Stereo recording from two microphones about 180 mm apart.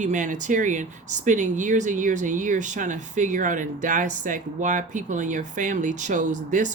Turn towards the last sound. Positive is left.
turn(degrees=-45)  # may be behind; listen again after turning